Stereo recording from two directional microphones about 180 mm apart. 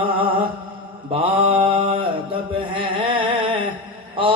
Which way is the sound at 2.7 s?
30° right (ahead or behind).